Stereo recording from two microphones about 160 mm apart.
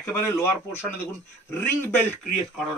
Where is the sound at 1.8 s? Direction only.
15° left (ahead or behind).